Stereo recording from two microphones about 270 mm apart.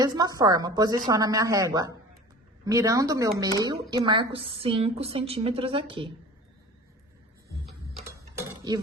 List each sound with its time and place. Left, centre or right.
0.0 s a woman's voice: centre
8.0 s a sound: centre
8.7 s a woman's voice: centre